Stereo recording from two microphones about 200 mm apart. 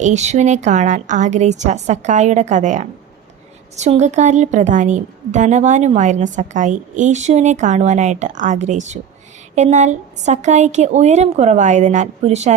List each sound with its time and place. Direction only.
0.0 s a woman's voice: 35° right (ahead or behind)